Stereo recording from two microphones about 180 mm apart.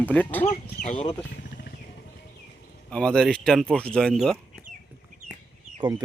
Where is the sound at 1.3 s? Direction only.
70° left (ahead or behind).